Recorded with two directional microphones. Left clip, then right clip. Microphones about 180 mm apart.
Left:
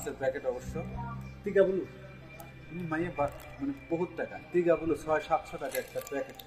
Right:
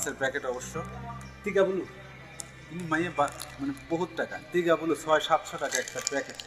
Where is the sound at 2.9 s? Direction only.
20° right (ahead or behind).